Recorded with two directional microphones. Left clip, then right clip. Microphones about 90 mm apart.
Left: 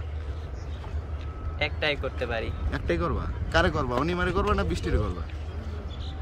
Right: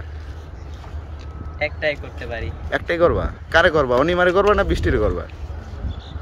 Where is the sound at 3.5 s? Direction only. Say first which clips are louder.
Right 10 dB; 30° right (ahead or behind).